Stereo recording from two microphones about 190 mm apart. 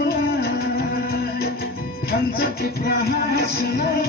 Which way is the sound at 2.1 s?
55° left (ahead or behind).